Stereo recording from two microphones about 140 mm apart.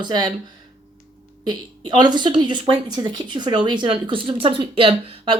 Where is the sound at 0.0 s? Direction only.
30° right (ahead or behind).